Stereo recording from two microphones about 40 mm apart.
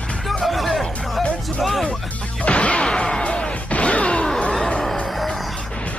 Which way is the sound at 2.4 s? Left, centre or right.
Left.